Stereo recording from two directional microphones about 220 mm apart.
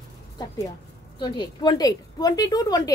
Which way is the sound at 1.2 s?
20° left (ahead or behind).